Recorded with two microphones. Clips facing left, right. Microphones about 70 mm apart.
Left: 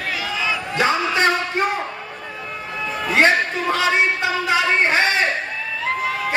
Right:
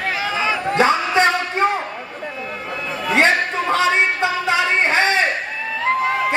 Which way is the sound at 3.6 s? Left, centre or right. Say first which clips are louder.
Right 2 dB; right.